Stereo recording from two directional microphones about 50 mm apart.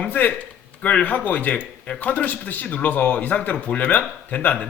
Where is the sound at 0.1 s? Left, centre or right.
Left.